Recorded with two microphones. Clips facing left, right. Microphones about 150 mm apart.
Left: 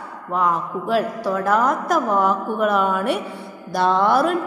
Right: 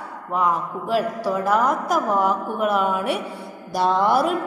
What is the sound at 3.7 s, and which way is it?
Music, 10° right (ahead or behind).